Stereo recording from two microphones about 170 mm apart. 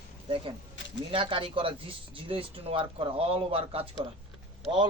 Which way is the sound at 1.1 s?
30° right (ahead or behind).